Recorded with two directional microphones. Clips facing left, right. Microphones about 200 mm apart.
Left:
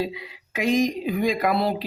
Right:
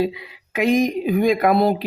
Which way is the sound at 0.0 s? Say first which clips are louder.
Right 6 dB; 60° right (ahead or behind).